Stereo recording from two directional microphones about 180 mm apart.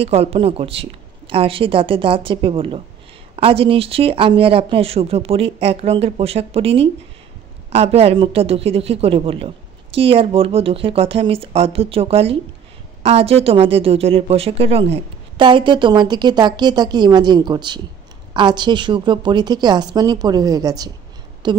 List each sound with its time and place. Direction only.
0.0 s speech: 35° right (ahead or behind)